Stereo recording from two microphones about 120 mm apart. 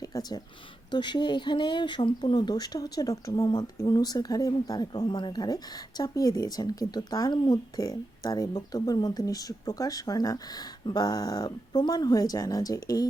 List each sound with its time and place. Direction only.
0.0 s speech: 30° left (ahead or behind)